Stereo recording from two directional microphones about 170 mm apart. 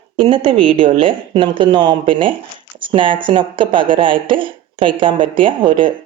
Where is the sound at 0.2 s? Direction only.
30° right (ahead or behind).